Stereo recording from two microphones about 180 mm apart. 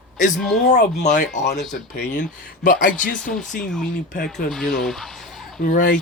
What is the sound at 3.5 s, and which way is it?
Speech, 5° left (ahead or behind).